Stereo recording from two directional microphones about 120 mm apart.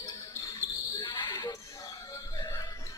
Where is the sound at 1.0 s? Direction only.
40° left (ahead or behind).